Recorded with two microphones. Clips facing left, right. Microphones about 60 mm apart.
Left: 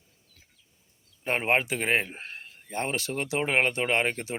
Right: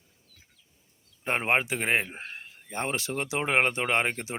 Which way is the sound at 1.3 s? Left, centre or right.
Right.